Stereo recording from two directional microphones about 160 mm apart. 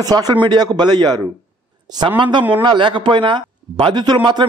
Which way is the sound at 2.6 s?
30° right (ahead or behind).